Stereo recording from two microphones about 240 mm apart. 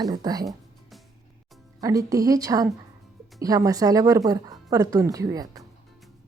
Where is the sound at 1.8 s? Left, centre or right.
Centre.